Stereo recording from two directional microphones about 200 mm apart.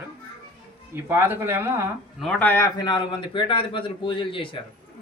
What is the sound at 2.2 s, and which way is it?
A man's voice, 10° left (ahead or behind).